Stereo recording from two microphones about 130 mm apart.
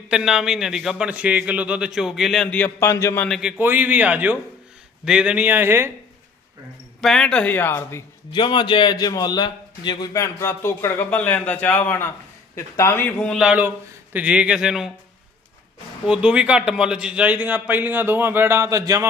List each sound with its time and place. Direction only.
0.1 s speech: 5° right (ahead or behind); by 3.2 s 20° left (ahead or behind)
3.2 s speech: centre (ahead or behind)
3.6 s a man's voice: 15° right (ahead or behind)
7.0 s speech: 5° left (ahead or behind); by 8.0 s 20° left (ahead or behind)
8.3 s a man's voice: 35° left (ahead or behind); by 13.4 s 10° left (ahead or behind)
13.4 s a man's voice: 10° right (ahead or behind)
16.0 s a man's voice: 5° right (ahead or behind); by 19.0 s 25° right (ahead or behind)